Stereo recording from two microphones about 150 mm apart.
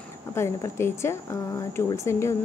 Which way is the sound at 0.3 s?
15° left (ahead or behind).